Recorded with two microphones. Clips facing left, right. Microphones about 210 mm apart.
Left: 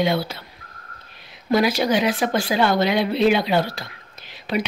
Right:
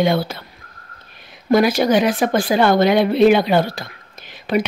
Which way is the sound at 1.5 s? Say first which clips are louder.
Right 4 dB; 50° right (ahead or behind).